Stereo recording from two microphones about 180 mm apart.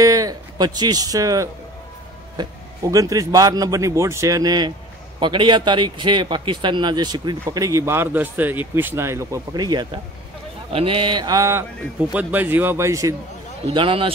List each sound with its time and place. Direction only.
0.0 s speech: 20° right (ahead or behind)
2.9 s speech: 20° right (ahead or behind)
13.7 s a man's voice: 30° right (ahead or behind)